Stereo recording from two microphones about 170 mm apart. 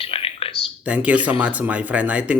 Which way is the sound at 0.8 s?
10° right (ahead or behind).